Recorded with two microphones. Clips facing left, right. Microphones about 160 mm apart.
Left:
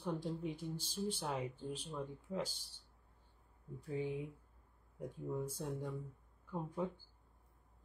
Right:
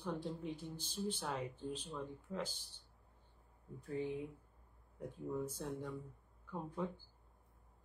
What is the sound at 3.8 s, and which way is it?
Speech, 10° left (ahead or behind).